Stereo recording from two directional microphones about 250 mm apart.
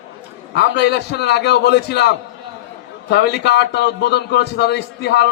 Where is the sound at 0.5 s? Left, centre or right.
Left.